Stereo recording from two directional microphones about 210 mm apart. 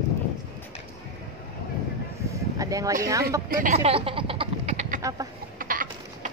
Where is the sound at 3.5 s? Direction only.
35° right (ahead or behind).